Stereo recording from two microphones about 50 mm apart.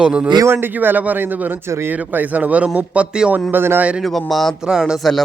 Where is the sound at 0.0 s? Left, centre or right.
Centre.